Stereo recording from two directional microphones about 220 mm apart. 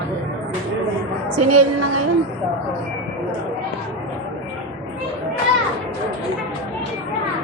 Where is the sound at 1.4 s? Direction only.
90° right.